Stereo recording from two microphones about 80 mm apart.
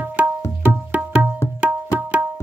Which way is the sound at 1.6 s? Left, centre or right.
Centre.